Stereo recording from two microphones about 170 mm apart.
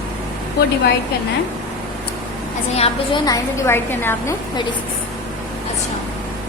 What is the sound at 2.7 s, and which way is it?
Speech, 35° left (ahead or behind).